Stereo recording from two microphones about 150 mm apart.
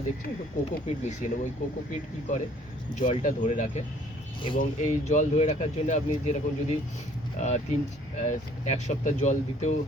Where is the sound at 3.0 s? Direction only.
60° left (ahead or behind).